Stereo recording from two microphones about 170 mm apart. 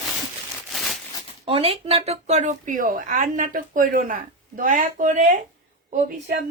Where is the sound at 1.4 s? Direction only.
35° right (ahead or behind); by 5.4 s 50° right (ahead or behind).